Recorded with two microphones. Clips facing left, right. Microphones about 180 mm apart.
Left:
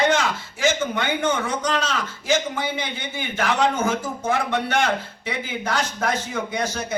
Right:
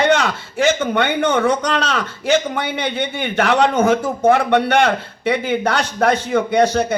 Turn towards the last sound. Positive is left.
turn(degrees=-65)  # may be behind; listen again after turning